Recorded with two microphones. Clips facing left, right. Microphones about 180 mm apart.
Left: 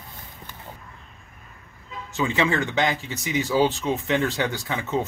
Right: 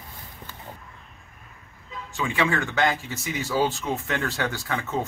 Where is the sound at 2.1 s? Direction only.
20° left (ahead or behind).